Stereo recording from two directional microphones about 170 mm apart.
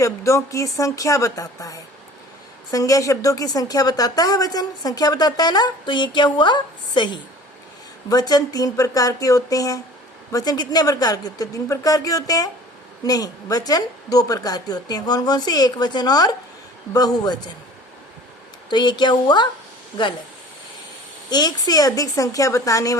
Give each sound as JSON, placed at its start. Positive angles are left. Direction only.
{"t": 0.0, "sound": "a woman's voice", "side_deg": 20}
{"t": 18.7, "sound": "a woman's voice", "side_deg": 25}
{"t": 21.2, "sound": "a woman's voice", "side_deg": 25}